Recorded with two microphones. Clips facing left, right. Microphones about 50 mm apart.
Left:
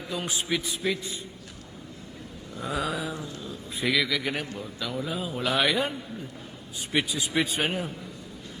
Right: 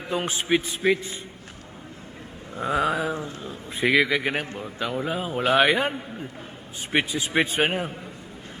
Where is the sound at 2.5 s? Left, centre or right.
Right.